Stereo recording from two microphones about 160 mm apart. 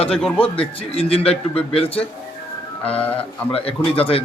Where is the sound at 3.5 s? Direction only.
35° left (ahead or behind).